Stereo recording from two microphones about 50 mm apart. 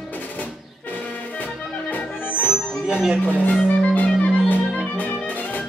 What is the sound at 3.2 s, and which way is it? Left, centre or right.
Speech, left.